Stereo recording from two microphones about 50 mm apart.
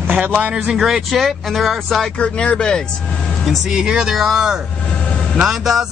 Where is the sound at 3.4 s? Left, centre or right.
Centre.